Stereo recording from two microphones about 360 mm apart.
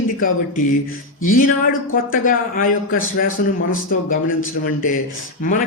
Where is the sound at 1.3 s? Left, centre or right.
Left.